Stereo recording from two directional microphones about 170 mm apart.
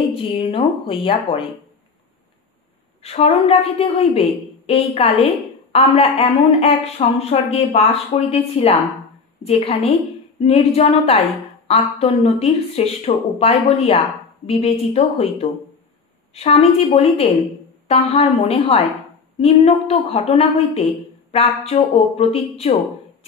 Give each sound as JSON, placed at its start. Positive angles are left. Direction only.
{"t": 0.1, "sound": "a woman's voice", "side_deg": 30}
{"t": 3.0, "sound": "a woman's voice", "side_deg": 35}
{"t": 16.3, "sound": "a woman's voice", "side_deg": 40}